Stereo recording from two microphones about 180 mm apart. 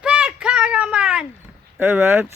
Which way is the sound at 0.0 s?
5° right (ahead or behind).